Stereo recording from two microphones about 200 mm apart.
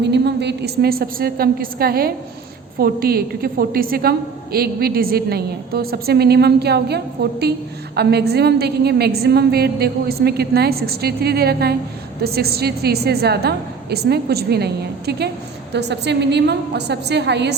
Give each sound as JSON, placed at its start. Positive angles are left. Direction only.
{"t": 0.0, "sound": "a woman's voice", "side_deg": -60}